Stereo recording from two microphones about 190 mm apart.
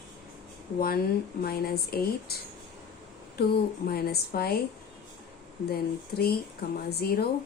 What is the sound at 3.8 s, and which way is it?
Speech, 55° left (ahead or behind).